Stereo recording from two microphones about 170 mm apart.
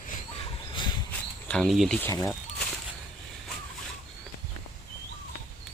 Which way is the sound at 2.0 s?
15° left (ahead or behind).